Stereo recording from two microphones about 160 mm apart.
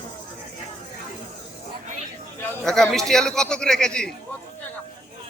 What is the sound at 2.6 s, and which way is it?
A man's voice, 5° left (ahead or behind).